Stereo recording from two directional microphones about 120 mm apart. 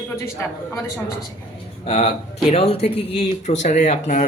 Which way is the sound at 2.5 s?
60° left (ahead or behind).